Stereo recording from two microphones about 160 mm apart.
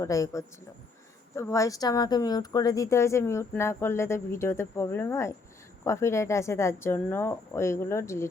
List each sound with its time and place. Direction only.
0.0 s a man's voice: 20° left (ahead or behind)